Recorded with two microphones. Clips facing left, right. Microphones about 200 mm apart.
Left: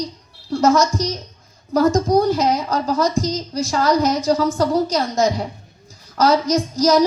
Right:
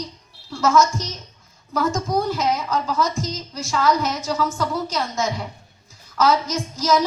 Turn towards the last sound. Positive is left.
turn(degrees=40)  # may be behind; listen again after turning